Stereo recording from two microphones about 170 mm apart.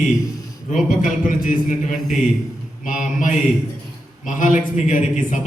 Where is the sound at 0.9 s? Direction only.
50° left (ahead or behind).